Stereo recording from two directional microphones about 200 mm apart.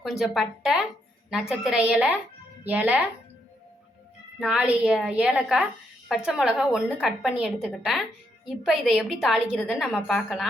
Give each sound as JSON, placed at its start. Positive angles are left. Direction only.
{"t": 0.0, "sound": "a woman's voice", "side_deg": 0}
{"t": 4.4, "sound": "a woman's voice", "side_deg": -5}